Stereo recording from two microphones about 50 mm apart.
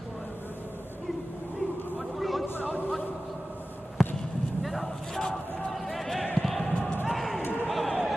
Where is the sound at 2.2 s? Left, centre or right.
Centre.